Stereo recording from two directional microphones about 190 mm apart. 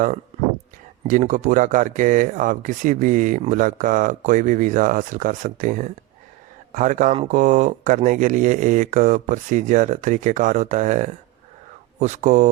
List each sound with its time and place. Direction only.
1.0 s speech: 40° right (ahead or behind)